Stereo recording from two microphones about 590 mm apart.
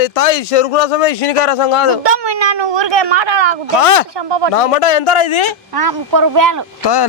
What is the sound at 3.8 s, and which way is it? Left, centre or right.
A man's voice, left.